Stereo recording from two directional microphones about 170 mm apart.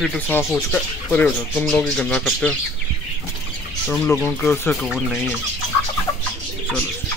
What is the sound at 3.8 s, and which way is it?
Speech, 10° left (ahead or behind).